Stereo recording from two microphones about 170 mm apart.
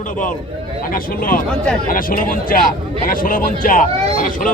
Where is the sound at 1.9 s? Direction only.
55° left (ahead or behind).